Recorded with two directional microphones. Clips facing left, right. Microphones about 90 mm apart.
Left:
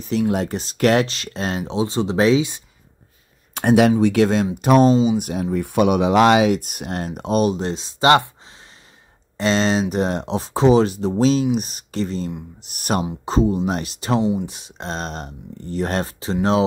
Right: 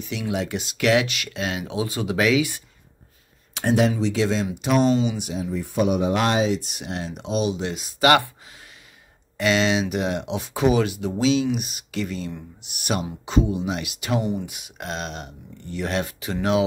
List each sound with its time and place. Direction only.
0.0 s speech: 40° left (ahead or behind)
1.8 s speech: 30° left (ahead or behind)
3.5 s speech: 65° left (ahead or behind)
4.6 s speech: 45° left (ahead or behind)
4.9 s speech: 35° left (ahead or behind)
5.2 s speech: 55° left (ahead or behind); by 6.5 s 90° left
6.5 s speech: 50° left (ahead or behind)
7.7 s speech: 30° left (ahead or behind)
9.4 s speech: 35° left (ahead or behind)